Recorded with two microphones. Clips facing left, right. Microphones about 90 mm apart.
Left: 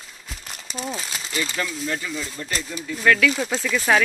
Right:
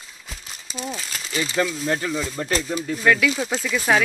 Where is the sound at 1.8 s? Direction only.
50° right (ahead or behind).